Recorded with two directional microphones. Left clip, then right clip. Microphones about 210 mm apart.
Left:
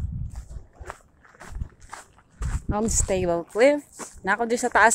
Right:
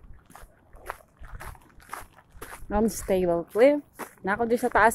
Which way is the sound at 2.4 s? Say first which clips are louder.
Right 1 dB; 5° right (ahead or behind).